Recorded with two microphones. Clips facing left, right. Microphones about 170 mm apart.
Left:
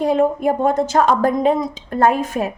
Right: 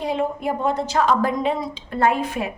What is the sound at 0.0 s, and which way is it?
A woman's voice, 50° left (ahead or behind).